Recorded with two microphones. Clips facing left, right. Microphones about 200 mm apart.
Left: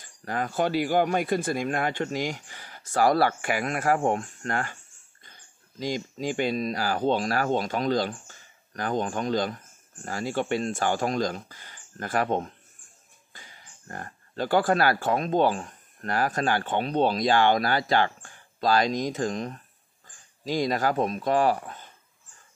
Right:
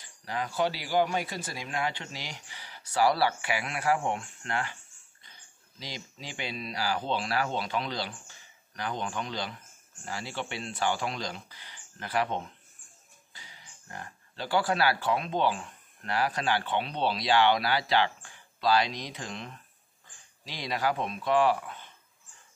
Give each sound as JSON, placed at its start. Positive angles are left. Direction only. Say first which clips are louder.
{"t": 0.0, "sound": "speech", "louder": "left 4 dB", "side_deg": 50}
{"t": 5.8, "sound": "speech", "louder": "left 12 dB", "side_deg": 45}